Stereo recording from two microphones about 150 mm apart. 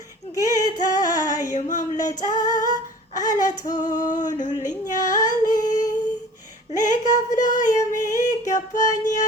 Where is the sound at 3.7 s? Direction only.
60° left (ahead or behind).